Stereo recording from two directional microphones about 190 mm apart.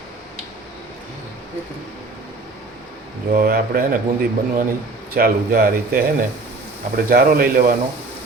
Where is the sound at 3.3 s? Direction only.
50° right (ahead or behind).